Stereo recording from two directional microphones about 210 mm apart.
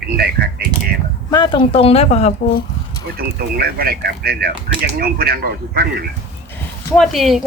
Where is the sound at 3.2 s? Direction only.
45° right (ahead or behind).